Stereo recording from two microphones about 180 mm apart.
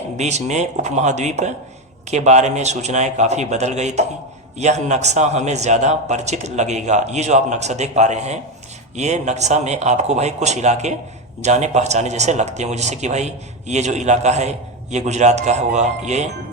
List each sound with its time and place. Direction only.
0.2 s speech: 40° right (ahead or behind)